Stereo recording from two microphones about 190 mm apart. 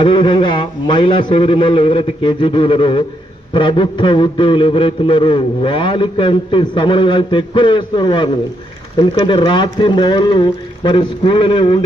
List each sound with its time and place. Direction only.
0.0 s a man's voice: 25° left (ahead or behind)